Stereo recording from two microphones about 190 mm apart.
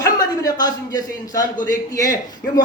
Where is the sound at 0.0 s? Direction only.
20° left (ahead or behind).